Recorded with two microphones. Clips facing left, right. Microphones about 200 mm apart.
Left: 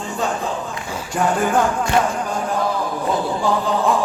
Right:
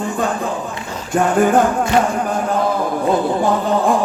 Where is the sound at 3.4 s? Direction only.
55° right (ahead or behind).